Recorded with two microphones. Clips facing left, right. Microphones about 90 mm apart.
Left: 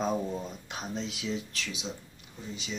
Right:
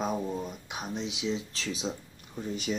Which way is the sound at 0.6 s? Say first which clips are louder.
Right 1 dB; 15° right (ahead or behind).